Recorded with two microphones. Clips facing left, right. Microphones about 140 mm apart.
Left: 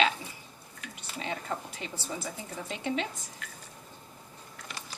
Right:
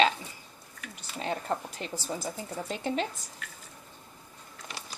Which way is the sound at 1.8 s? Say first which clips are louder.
Right 3 dB; 45° right (ahead or behind).